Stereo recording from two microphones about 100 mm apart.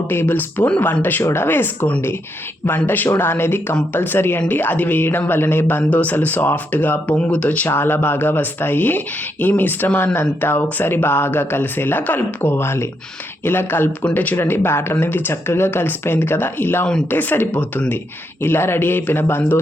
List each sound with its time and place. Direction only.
0.1 s speech: 20° left (ahead or behind)